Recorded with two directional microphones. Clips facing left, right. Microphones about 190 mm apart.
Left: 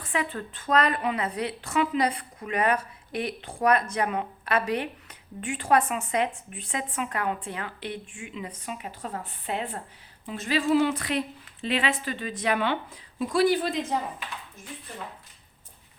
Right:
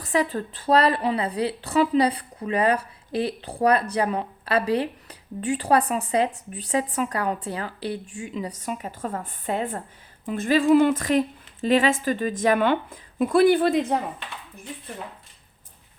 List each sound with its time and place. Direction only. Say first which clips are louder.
0.0 s a woman's voice: right 6 dB; 40° right (ahead or behind); by 14.0 s 60° right (ahead or behind)